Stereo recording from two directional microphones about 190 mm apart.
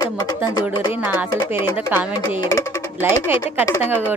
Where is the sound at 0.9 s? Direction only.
10° right (ahead or behind).